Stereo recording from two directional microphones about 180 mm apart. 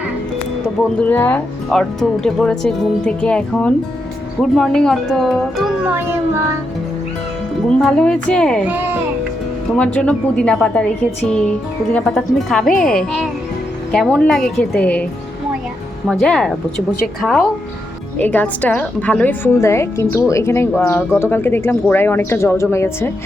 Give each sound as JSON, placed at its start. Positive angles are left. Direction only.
{"t": 0.9, "sound": "speech", "side_deg": 10}
{"t": 7.8, "sound": "speech", "side_deg": 5}
{"t": 8.6, "sound": "a child's voice", "side_deg": -10}
{"t": 9.7, "sound": "a child's voice", "side_deg": 5}
{"t": 16.0, "sound": "a woman's voice", "side_deg": 5}